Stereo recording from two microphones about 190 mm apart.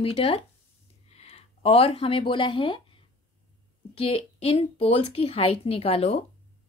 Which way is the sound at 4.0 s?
30° left (ahead or behind).